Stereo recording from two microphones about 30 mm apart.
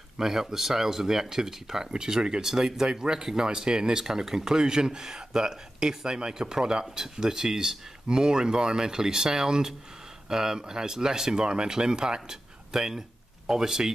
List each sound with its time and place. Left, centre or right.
0.2 s speech: centre